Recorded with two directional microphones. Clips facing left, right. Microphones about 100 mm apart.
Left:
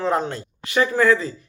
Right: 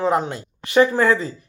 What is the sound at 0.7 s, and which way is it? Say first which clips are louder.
Speech: right 2 dB; 25° right (ahead or behind).